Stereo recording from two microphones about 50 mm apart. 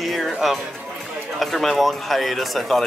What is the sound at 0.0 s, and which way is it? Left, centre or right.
Music, centre.